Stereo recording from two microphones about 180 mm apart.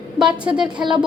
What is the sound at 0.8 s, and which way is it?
Speech, 25° right (ahead or behind).